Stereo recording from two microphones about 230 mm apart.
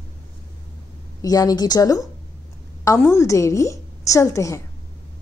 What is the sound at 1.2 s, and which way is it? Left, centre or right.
Speech, centre.